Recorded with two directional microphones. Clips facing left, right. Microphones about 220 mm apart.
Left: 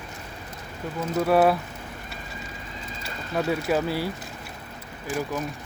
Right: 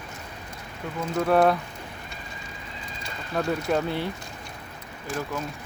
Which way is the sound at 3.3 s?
5° left (ahead or behind).